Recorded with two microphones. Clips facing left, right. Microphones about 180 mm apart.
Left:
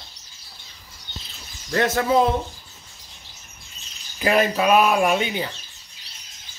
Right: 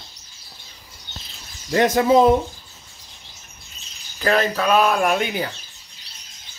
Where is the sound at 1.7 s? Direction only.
15° right (ahead or behind).